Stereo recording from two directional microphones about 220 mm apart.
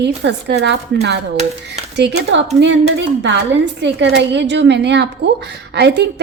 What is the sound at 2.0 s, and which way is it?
A woman's voice, 50° right (ahead or behind).